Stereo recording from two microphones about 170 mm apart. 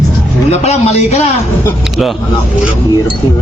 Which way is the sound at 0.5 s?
40° left (ahead or behind).